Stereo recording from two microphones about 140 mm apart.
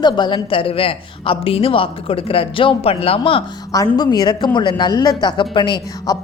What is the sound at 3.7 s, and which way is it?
A woman's voice, 25° left (ahead or behind).